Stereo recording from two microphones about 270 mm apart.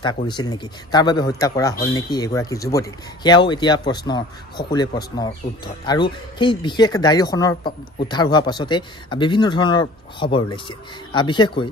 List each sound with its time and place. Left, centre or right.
0.0 s speech: centre
5.9 s speech: centre